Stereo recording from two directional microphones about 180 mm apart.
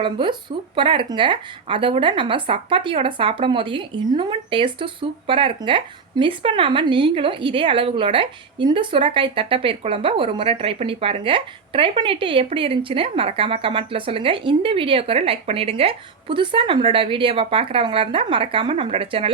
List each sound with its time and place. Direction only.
0.0 s speech: 25° right (ahead or behind)